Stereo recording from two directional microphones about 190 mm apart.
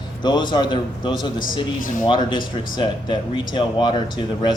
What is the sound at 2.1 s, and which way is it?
Speech, 25° left (ahead or behind).